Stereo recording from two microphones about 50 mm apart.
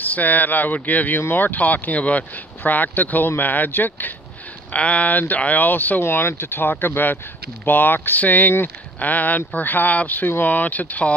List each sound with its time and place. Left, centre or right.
0.1 s speech: left
4.7 s speech: left
6.0 s speech: left